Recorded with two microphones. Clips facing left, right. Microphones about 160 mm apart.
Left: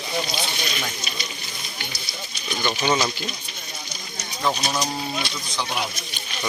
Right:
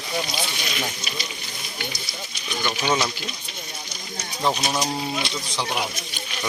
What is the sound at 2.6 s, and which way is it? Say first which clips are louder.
Speech: left 1 dB; centre (ahead or behind).